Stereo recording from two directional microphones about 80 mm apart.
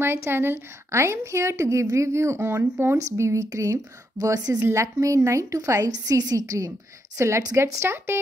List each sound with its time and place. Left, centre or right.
0.0 s a woman's voice: right